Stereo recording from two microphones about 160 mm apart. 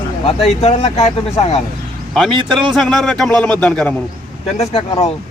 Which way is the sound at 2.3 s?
30° right (ahead or behind).